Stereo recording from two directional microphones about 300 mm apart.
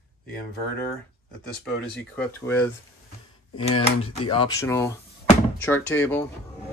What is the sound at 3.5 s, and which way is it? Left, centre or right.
Speech, centre.